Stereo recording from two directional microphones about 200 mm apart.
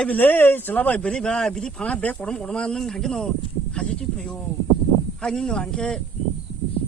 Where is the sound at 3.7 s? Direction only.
5° left (ahead or behind).